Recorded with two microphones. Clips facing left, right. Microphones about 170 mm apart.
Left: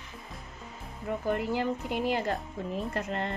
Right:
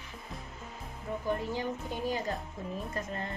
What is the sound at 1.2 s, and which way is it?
A woman's voice, 75° left (ahead or behind).